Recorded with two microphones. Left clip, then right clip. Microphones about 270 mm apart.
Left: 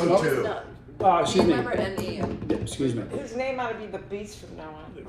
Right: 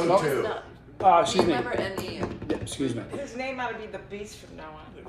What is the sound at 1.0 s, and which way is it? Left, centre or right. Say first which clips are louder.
A man's voice: right 1 dB; centre.